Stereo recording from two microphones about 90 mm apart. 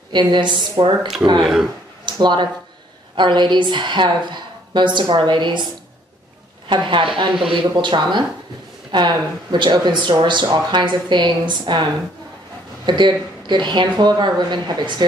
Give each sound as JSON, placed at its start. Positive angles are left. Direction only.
{"t": 0.1, "sound": "speech", "side_deg": -60}
{"t": 1.4, "sound": "speech", "side_deg": -5}
{"t": 2.0, "sound": "speech", "side_deg": -60}
{"t": 6.7, "sound": "speech", "side_deg": -65}